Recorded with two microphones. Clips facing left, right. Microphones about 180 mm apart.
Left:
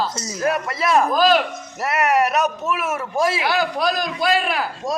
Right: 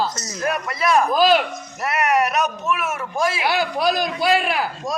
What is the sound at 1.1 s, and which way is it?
Speech, 5° right (ahead or behind).